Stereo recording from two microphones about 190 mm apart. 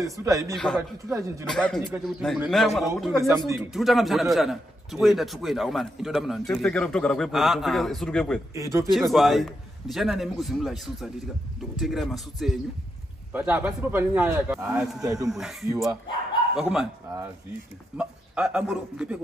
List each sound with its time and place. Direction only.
0.0 s a man's voice: 15° right (ahead or behind)
0.6 s a man's voice: 5° left (ahead or behind)
3.3 s a man's voice: 15° right (ahead or behind)
3.7 s a man's voice: centre (ahead or behind)
8.5 s a man's voice: 15° right (ahead or behind)
8.9 s a man's voice: centre (ahead or behind)
13.3 s a man's voice: 10° right (ahead or behind)
16.5 s a man's voice: 5° right (ahead or behind)
17.9 s a man's voice: 5° right (ahead or behind)